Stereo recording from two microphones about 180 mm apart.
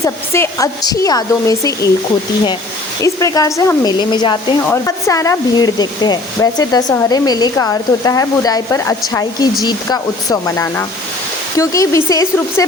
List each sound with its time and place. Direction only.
0.0 s speech: 15° left (ahead or behind)
3.0 s speech: 20° left (ahead or behind)
4.6 s speech: 15° left (ahead or behind)